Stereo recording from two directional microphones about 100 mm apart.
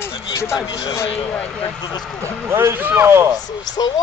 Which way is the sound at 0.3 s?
30° left (ahead or behind).